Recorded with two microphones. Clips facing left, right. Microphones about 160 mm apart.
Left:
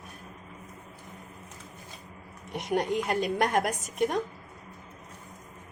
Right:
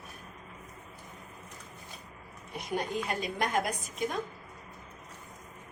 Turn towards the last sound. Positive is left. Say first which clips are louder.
# left 6 dB
turn(degrees=70)  # may be behind; listen again after turning